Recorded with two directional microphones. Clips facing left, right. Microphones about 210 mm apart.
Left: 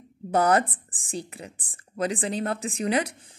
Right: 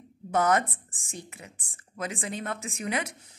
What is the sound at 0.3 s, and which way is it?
Speech, 35° left (ahead or behind).